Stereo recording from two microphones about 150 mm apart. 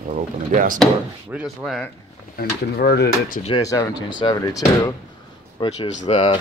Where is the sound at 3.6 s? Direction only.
25° left (ahead or behind).